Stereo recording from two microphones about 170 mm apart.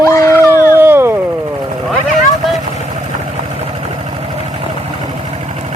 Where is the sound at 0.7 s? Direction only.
10° right (ahead or behind).